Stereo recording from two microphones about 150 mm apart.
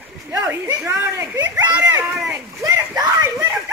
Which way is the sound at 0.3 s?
20° right (ahead or behind).